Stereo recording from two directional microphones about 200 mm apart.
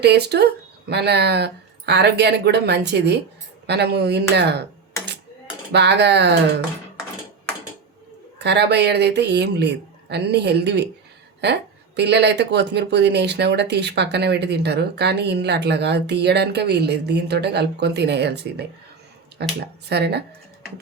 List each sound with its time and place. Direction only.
0.0 s speech: 55° right (ahead or behind)
5.7 s speech: 60° right (ahead or behind)
8.4 s speech: 60° right (ahead or behind)
11.9 s speech: 55° right (ahead or behind)